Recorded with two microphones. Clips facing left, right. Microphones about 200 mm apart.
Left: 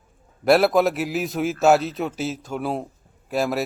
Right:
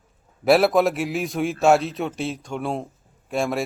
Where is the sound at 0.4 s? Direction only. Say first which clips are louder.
Even; centre (ahead or behind).